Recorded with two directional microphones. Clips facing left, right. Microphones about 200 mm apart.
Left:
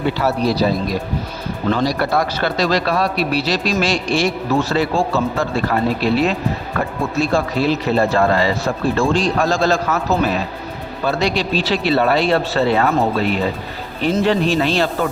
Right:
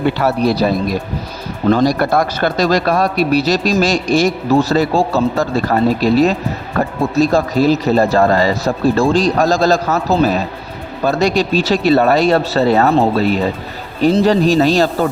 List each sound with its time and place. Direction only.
0.2 s speech: 55° right (ahead or behind)
1.7 s speech: 50° right (ahead or behind)